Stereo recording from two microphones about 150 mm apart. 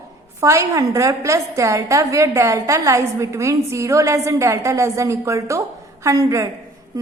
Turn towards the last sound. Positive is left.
turn(degrees=-25)  # may be behind; listen again after turning